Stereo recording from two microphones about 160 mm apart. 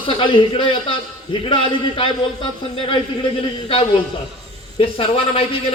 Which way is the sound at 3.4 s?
35° left (ahead or behind).